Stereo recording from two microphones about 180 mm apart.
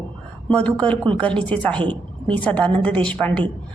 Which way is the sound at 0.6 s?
5° left (ahead or behind).